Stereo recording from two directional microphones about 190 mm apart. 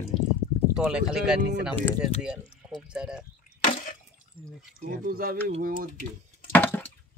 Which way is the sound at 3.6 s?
40° left (ahead or behind).